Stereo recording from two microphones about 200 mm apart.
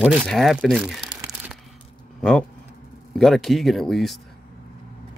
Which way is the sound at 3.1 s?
Centre (ahead or behind).